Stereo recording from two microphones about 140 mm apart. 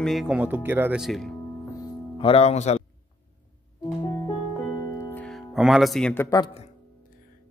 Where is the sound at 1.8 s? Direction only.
40° left (ahead or behind).